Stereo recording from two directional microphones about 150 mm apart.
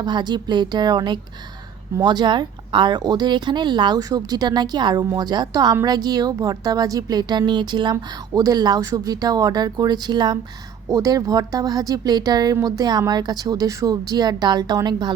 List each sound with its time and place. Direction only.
0.0 s speech: 30° right (ahead or behind)